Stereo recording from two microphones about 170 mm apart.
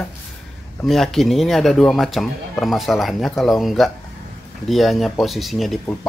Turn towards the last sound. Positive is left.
turn(degrees=0)  # may be behind; listen again after turning